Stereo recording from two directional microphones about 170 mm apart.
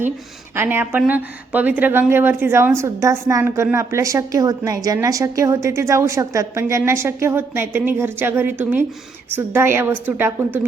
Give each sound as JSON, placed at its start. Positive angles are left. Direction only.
{"t": 0.5, "sound": "speech", "side_deg": -15}